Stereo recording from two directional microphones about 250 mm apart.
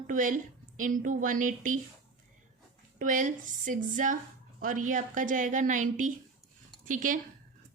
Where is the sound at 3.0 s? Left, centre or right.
Right.